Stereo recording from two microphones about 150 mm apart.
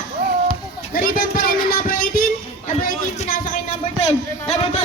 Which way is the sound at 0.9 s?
70° left (ahead or behind).